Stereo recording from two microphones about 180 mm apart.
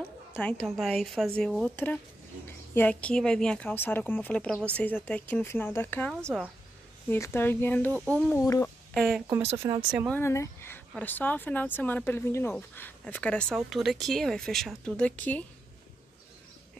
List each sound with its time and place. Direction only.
0.4 s speech: 5° left (ahead or behind)
8.9 s speech: centre (ahead or behind)
9.3 s speech: 15° right (ahead or behind)
10.0 s speech: 10° left (ahead or behind)